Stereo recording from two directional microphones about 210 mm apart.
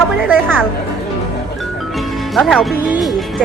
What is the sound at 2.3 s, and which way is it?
Speech, centre (ahead or behind).